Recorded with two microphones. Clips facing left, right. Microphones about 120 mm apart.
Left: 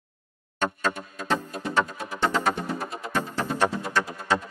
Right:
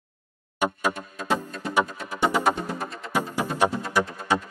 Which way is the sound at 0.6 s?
10° right (ahead or behind).